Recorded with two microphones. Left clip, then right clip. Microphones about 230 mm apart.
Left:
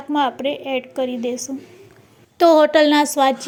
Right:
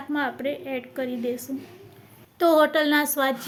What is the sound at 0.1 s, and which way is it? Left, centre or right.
A woman's voice, left.